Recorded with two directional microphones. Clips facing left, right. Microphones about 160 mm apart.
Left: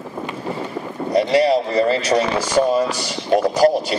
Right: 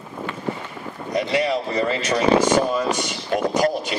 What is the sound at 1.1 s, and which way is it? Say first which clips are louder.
Speech: left 6 dB; 35° left (ahead or behind).